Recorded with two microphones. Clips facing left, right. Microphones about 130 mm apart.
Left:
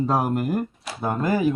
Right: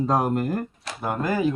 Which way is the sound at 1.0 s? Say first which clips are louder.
Left 2 dB; 25° left (ahead or behind).